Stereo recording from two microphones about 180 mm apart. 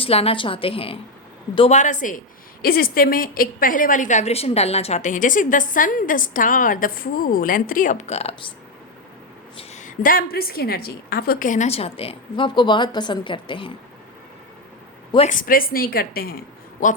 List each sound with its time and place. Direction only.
0.0 s a woman's voice: 35° left (ahead or behind)
9.6 s a woman's voice: 45° left (ahead or behind)
15.3 s speech: 50° left (ahead or behind)